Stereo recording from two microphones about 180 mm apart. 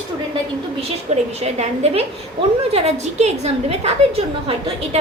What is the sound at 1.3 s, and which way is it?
A woman's voice, 35° right (ahead or behind).